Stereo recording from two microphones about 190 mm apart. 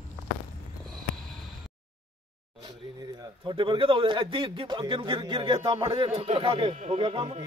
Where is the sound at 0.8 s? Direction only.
Centre (ahead or behind).